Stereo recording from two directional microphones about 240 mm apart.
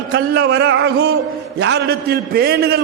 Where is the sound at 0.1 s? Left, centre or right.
Right.